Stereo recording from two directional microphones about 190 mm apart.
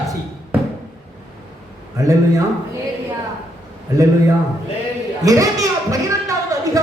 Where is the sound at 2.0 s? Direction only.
15° right (ahead or behind).